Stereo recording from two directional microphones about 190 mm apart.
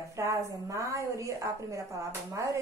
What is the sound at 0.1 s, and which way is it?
A woman's voice, 15° right (ahead or behind).